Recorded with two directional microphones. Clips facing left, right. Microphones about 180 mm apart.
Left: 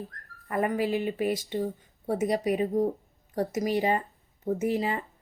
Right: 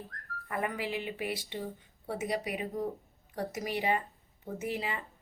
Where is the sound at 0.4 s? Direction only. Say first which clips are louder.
Left 8 dB; 40° left (ahead or behind).